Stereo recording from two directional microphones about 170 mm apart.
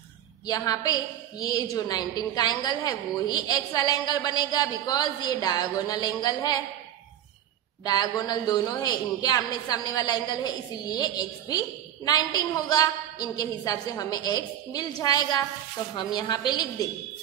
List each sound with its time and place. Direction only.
0.5 s a man's voice: 20° left (ahead or behind)
7.8 s a man's voice: 25° left (ahead or behind)